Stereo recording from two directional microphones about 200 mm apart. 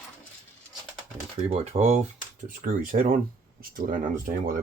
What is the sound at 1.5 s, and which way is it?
Speech, 30° right (ahead or behind).